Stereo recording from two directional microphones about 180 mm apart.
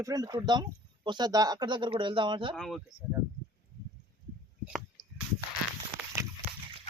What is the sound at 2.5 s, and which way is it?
Speech, 5° left (ahead or behind).